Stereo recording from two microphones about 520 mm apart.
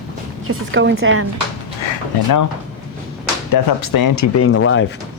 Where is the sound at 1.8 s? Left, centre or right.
Left.